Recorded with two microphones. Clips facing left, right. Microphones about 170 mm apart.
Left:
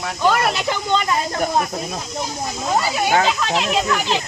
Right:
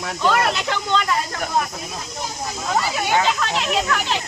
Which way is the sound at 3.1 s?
35° left (ahead or behind).